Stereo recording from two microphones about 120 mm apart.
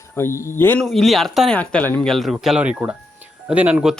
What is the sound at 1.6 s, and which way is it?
Speech, 15° left (ahead or behind).